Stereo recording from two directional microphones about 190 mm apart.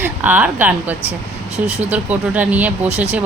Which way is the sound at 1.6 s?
35° right (ahead or behind).